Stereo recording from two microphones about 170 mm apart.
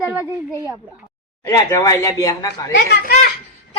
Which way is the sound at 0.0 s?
10° right (ahead or behind).